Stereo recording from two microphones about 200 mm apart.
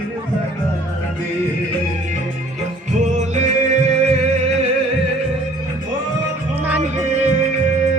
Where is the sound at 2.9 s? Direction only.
35° right (ahead or behind).